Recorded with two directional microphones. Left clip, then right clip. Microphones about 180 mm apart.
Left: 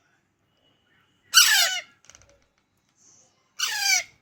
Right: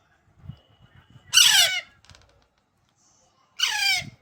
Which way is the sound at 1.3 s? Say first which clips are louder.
Right 1 dB; 15° right (ahead or behind).